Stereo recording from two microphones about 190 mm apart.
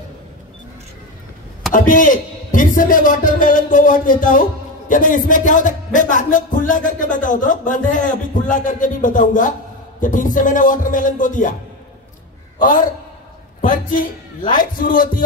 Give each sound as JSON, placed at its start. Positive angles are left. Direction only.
{"t": 1.7, "sound": "speech", "side_deg": 45}
{"t": 13.6, "sound": "speech", "side_deg": 45}